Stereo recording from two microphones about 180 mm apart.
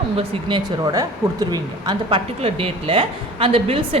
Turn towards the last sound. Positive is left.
turn(degrees=-30)  # may be behind; listen again after turning